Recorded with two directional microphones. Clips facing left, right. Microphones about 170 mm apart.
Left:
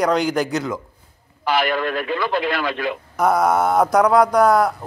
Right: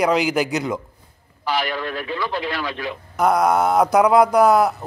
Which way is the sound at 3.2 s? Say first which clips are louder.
Even; centre (ahead or behind).